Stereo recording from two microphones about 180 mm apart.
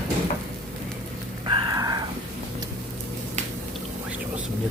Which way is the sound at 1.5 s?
20° right (ahead or behind).